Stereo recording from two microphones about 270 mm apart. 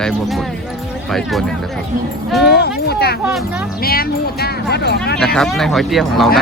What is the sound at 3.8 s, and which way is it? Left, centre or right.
Speech, left.